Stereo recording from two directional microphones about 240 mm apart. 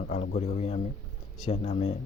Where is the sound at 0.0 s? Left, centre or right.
Left.